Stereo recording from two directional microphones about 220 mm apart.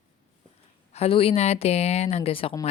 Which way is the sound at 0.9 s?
25° left (ahead or behind).